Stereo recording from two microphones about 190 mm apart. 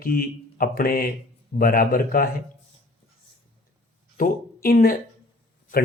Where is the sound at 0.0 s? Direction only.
50° left (ahead or behind).